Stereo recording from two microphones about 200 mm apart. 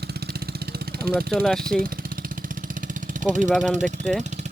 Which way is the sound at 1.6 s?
45° right (ahead or behind).